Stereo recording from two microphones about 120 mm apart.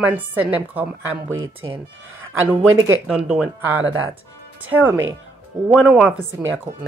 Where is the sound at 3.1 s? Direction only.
10° right (ahead or behind).